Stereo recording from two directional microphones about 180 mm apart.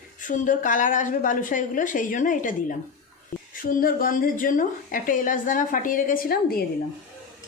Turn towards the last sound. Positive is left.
turn(degrees=55)  # may be behind; listen again after turning